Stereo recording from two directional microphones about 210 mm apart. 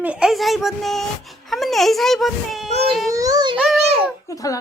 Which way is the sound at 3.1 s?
15° right (ahead or behind).